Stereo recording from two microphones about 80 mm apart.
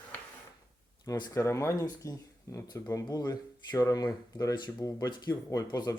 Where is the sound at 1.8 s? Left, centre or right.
Left.